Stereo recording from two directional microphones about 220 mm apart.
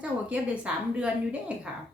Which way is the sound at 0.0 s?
5° right (ahead or behind).